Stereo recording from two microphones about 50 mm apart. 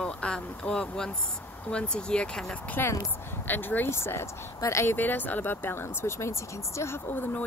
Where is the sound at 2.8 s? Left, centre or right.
Left.